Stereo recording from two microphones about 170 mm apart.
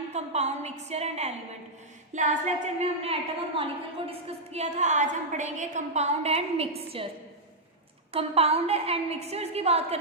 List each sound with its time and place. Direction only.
0.1 s a woman's voice: 40° right (ahead or behind)
8.1 s a woman's voice: 35° right (ahead or behind)